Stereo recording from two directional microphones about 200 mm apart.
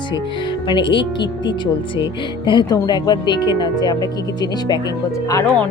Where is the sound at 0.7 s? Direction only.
25° left (ahead or behind).